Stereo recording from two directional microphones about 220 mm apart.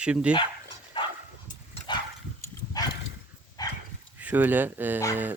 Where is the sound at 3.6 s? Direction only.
20° left (ahead or behind).